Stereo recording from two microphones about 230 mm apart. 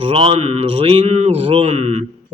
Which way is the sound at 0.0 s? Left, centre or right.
Right.